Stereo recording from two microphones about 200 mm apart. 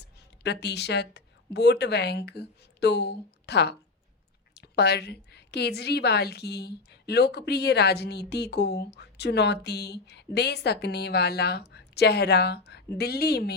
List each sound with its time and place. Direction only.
0.0 s a woman's voice: 55° left (ahead or behind)